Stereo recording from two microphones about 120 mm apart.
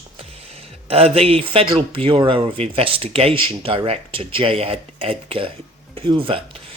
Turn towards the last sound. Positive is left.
turn(degrees=-50)  # may be behind; listen again after turning